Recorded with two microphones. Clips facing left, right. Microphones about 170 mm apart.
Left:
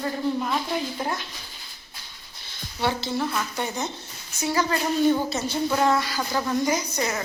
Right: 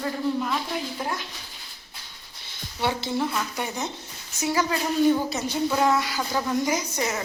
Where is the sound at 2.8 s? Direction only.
20° right (ahead or behind).